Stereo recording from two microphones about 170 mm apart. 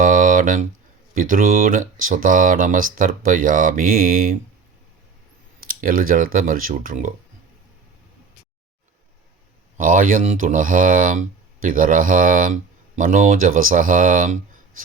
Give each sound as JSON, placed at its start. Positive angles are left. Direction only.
{"t": 0.0, "sound": "a sound", "side_deg": -50}
{"t": 1.1, "sound": "speech", "side_deg": -55}
{"t": 5.6, "sound": "speech", "side_deg": -55}
{"t": 9.7, "sound": "speech", "side_deg": -50}